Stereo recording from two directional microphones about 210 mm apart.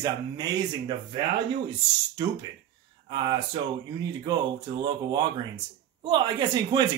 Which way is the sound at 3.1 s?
20° right (ahead or behind).